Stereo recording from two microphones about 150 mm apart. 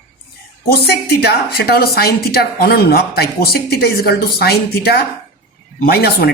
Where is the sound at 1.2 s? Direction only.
90° left.